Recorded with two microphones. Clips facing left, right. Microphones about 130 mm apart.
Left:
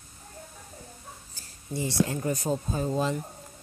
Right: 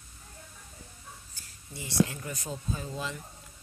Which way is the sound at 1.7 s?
35° left (ahead or behind).